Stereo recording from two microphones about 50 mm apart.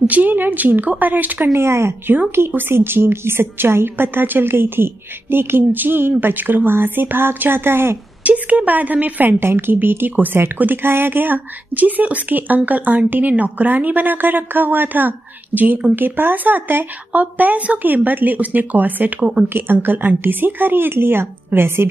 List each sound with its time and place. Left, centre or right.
0.0 s speech: right
1.5 s speech: right
2.3 s a woman's voice: right
8.2 s a woman's voice: right
9.4 s a woman's voice: right
17.1 s speech: right
19.5 s a woman's voice: right